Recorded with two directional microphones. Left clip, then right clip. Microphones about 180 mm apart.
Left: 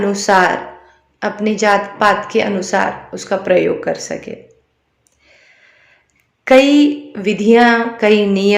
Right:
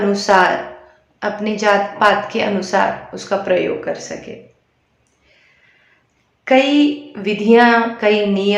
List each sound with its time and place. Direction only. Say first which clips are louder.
0.0 s a woman's voice: left 1 dB; 20° left (ahead or behind)
6.4 s a woman's voice: left 4 dB; 30° left (ahead or behind)